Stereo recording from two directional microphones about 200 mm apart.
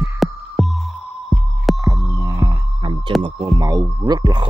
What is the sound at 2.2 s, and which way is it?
Music, 20° right (ahead or behind).